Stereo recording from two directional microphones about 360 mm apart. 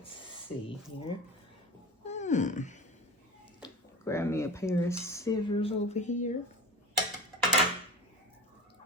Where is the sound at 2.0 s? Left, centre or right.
Centre.